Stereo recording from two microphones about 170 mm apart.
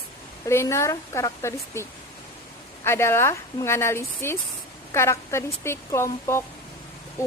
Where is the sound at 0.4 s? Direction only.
15° left (ahead or behind).